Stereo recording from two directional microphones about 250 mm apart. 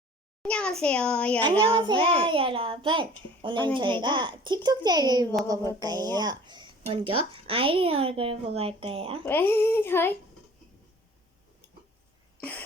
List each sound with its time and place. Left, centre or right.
0.4 s a child's voice: centre
1.4 s a child's voice: right
9.2 s speech: centre
12.4 s cough: centre